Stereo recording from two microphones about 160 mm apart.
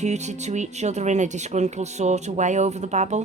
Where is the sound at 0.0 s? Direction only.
45° right (ahead or behind).